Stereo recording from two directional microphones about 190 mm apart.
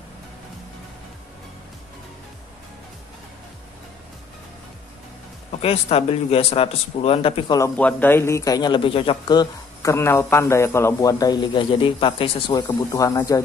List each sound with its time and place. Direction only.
5.6 s speech: 30° left (ahead or behind)